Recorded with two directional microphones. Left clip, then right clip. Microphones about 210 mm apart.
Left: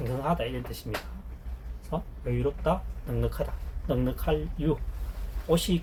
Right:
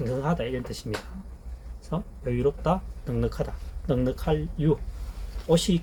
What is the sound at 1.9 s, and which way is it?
Speech, 50° right (ahead or behind).